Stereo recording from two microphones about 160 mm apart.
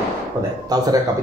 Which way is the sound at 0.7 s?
25° right (ahead or behind).